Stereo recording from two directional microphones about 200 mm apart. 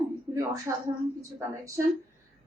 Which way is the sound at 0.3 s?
15° right (ahead or behind).